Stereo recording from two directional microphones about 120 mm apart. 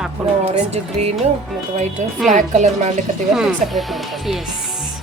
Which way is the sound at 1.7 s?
75° right (ahead or behind).